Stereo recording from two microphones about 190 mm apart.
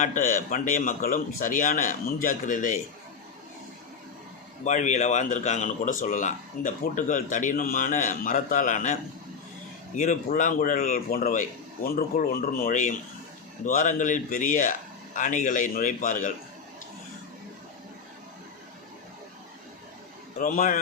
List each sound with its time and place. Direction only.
0.0 s a man's voice: 45° left (ahead or behind)
4.6 s speech: 40° left (ahead or behind)
10.0 s a man's voice: 40° left (ahead or behind)
20.4 s a man's voice: 45° left (ahead or behind)